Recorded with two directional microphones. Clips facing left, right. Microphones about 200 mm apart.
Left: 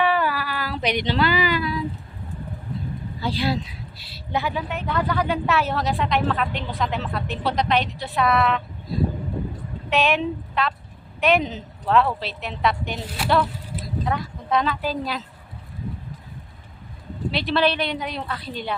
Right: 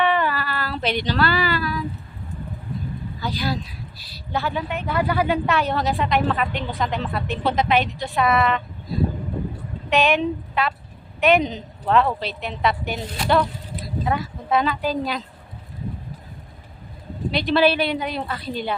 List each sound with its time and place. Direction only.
0.0 s a sound: 5° left (ahead or behind)
3.2 s speech: 25° left (ahead or behind)
4.5 s a woman's voice: centre (ahead or behind)
17.3 s a woman's voice: centre (ahead or behind)